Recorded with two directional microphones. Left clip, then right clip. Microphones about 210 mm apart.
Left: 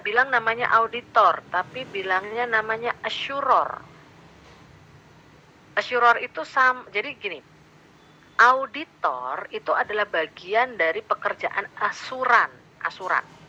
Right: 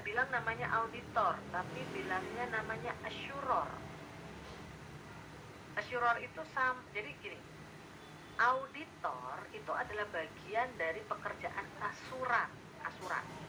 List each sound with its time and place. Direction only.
0.0 s a woman's voice: 40° left (ahead or behind)
5.7 s a woman's voice: 40° left (ahead or behind)
8.4 s a woman's voice: 40° left (ahead or behind)